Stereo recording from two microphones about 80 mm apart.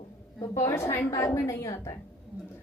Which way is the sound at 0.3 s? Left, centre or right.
Left.